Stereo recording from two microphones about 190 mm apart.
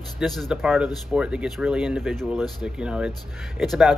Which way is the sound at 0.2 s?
Centre (ahead or behind).